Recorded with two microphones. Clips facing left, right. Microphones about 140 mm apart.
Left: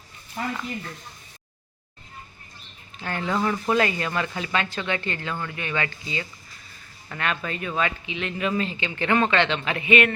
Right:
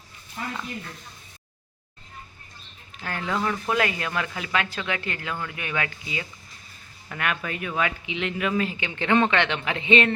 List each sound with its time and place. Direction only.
3.0 s speech: centre (ahead or behind); by 8.4 s 15° right (ahead or behind)
8.4 s speech: 5° right (ahead or behind); by 10.1 s 25° right (ahead or behind)